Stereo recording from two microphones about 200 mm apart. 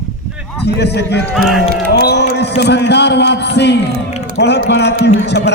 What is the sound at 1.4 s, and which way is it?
Speech, centre (ahead or behind).